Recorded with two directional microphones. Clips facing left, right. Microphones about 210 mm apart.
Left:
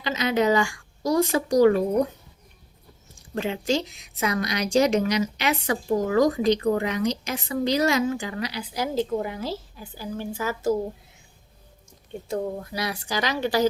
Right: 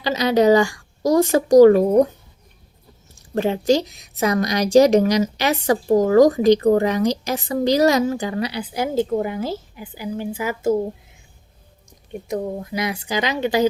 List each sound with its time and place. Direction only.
0.0 s a woman's voice: 35° right (ahead or behind)
3.3 s a woman's voice: 40° right (ahead or behind)
9.8 s a woman's voice: 15° right (ahead or behind)
11.9 s speech: 15° right (ahead or behind)